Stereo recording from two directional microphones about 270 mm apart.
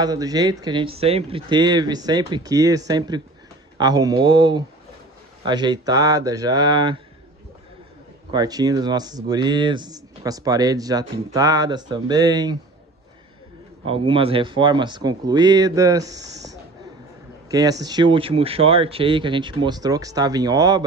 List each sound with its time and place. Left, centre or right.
0.0 s speech: centre
8.3 s speech: centre
13.8 s speech: centre